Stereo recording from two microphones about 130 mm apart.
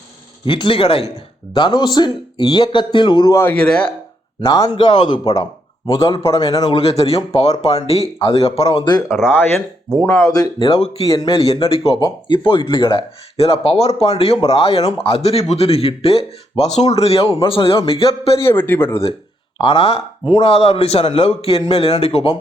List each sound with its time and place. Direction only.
0.4 s a man's voice: 40° left (ahead or behind)
3.5 s speech: 10° left (ahead or behind)
4.5 s a man's voice: 30° left (ahead or behind)
6.3 s speech: 45° left (ahead or behind)
9.0 s speech: 5° right (ahead or behind)
9.9 s speech: 15° left (ahead or behind); by 10.8 s 30° left (ahead or behind)
11.3 s speech: 45° left (ahead or behind)
18.4 s speech: 15° left (ahead or behind)
19.6 s speech: 45° left (ahead or behind)